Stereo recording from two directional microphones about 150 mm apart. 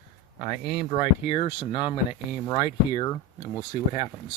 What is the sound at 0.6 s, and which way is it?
Speech, centre (ahead or behind).